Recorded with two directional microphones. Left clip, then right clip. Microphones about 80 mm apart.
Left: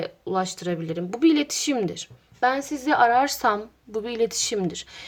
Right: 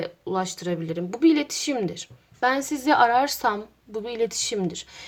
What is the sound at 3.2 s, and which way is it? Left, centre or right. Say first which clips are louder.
Speech: left 2 dB; left.